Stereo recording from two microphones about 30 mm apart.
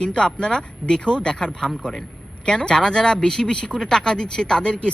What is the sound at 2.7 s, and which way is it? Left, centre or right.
Speech, centre.